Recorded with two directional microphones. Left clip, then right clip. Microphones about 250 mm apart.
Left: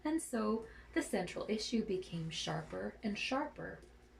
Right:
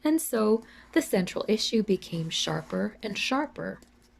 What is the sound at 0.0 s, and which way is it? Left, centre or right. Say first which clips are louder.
Speech: right 12 dB; right.